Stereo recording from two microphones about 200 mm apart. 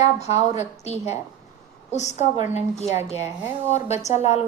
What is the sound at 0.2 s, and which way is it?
A woman's voice, 35° left (ahead or behind).